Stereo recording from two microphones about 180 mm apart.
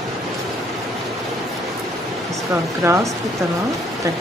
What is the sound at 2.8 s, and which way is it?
Speech, 15° right (ahead or behind).